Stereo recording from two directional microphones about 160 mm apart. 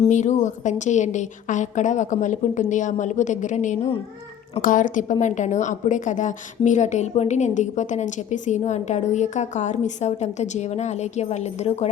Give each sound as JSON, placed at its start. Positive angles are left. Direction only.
{"t": 0.1, "sound": "a woman's voice", "side_deg": 50}